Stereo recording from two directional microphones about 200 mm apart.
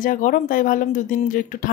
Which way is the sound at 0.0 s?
40° left (ahead or behind).